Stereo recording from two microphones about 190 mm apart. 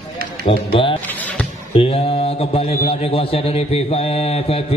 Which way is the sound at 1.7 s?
30° left (ahead or behind).